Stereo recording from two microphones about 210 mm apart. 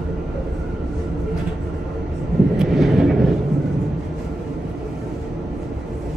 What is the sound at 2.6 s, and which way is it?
Vehicle, centre (ahead or behind).